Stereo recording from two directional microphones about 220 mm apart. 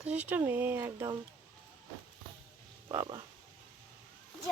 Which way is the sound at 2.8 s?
20° right (ahead or behind).